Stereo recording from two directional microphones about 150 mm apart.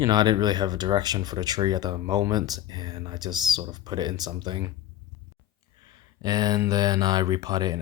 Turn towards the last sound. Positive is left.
turn(degrees=-25)  # may be behind; listen again after turning